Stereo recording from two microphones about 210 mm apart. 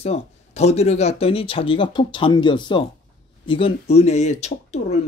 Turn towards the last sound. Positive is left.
turn(degrees=30)  # may be behind; listen again after turning